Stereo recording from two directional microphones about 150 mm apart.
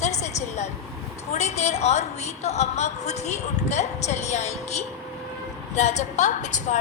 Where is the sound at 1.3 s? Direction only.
50° left (ahead or behind).